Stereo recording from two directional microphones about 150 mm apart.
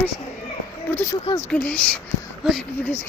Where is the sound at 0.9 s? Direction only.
15° left (ahead or behind).